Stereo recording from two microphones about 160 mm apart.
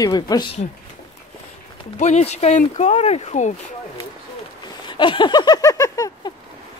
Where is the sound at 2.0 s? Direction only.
45° left (ahead or behind).